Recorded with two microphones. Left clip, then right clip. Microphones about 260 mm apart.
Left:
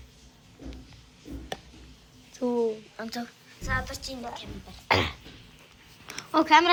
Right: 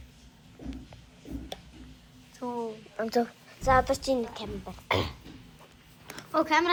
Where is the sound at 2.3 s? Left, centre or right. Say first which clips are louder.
Left 8 dB; left.